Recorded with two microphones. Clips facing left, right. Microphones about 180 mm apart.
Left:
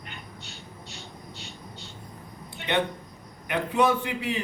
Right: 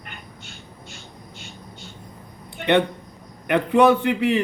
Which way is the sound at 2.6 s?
60° right (ahead or behind).